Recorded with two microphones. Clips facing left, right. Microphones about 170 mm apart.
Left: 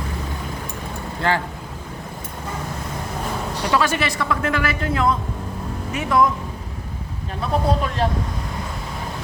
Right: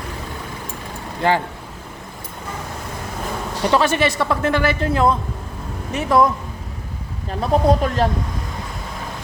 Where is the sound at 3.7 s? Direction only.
30° right (ahead or behind).